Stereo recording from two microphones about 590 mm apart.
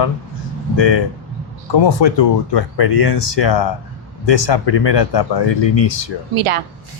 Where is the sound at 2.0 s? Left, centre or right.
Left.